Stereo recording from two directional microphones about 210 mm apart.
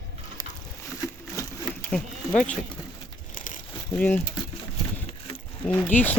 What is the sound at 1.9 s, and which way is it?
Speech, 5° left (ahead or behind).